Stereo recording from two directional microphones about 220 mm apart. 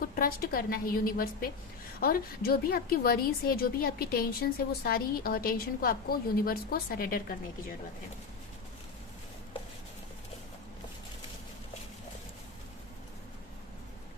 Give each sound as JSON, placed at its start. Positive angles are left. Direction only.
{"t": 0.0, "sound": "a woman's voice", "side_deg": 40}